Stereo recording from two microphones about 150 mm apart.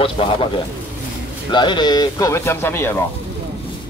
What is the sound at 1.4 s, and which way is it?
Speech, 30° left (ahead or behind).